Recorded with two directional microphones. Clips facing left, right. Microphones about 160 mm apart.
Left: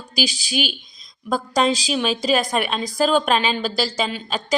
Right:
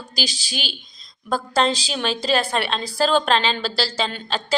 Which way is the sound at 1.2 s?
10° left (ahead or behind).